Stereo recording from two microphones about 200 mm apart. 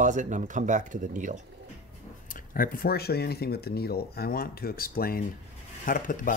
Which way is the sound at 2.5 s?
45° left (ahead or behind).